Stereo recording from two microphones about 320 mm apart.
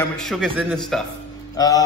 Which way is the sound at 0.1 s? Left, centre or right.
Centre.